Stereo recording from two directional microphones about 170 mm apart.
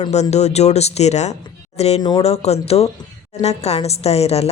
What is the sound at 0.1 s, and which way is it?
Speech, 40° left (ahead or behind).